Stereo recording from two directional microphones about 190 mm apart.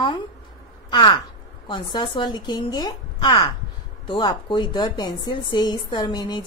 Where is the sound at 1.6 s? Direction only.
25° left (ahead or behind).